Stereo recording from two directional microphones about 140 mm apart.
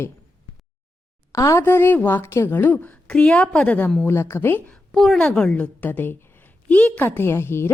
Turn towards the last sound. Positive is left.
turn(degrees=15)  # may be behind; listen again after turning